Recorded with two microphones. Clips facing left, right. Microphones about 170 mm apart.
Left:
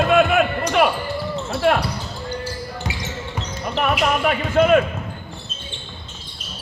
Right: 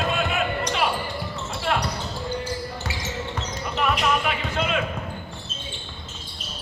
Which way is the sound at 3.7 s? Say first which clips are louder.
Left 3 dB; 50° left (ahead or behind).